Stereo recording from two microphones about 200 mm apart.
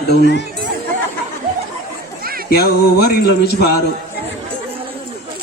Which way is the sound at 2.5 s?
50° left (ahead or behind).